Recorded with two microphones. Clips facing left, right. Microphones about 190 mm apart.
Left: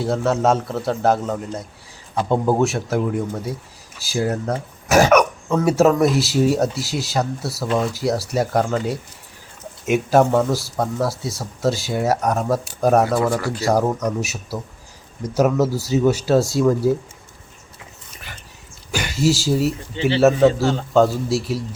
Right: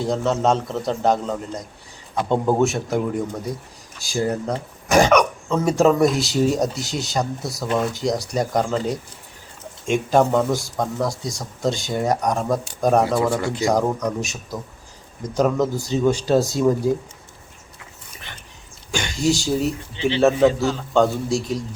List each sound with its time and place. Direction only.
0.0 s speech: 5° left (ahead or behind)
13.3 s speech: 20° right (ahead or behind)
13.7 s speech: 10° left (ahead or behind)
18.9 s speech: 5° left (ahead or behind)